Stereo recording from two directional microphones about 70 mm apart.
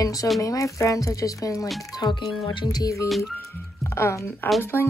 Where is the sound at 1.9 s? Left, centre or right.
Left.